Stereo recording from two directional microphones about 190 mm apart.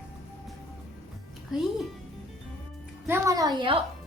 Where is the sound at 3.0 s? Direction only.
15° right (ahead or behind).